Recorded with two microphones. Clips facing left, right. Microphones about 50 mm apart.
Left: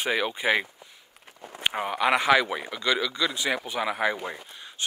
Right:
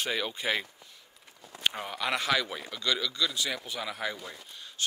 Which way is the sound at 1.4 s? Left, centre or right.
Left.